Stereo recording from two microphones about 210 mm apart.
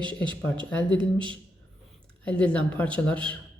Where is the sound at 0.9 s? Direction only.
25° right (ahead or behind).